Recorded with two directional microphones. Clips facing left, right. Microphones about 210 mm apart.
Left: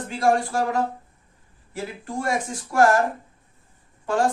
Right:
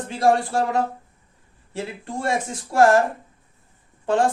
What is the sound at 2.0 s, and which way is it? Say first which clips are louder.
Speech: right 1 dB; 25° right (ahead or behind).